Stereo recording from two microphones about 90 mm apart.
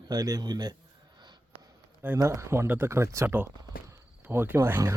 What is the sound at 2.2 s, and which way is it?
A man's voice, 30° right (ahead or behind).